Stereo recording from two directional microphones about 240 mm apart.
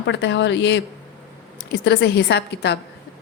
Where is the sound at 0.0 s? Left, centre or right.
Left.